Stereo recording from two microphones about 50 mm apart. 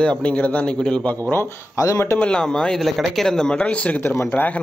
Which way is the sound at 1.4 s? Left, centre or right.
Left.